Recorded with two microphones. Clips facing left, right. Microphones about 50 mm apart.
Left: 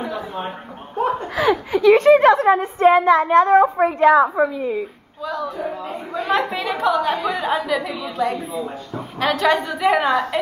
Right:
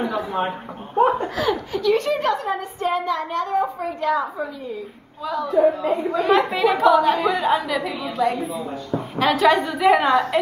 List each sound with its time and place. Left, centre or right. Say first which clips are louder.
0.0 s a sound: right 3 dB; centre
0.9 s belly laugh: right 4 dB; centre
1.3 s a woman's voice: left 4 dB; left
5.2 s a woman's voice: right 7 dB; centre